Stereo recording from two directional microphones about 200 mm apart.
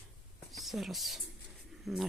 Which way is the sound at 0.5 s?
Centre (ahead or behind).